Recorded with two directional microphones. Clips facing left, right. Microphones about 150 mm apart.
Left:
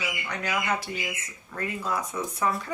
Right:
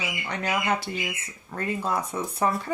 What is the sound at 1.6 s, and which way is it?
Speech, 30° right (ahead or behind).